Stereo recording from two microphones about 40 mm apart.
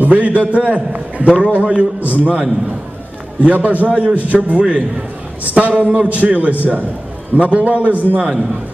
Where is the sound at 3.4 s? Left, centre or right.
Right.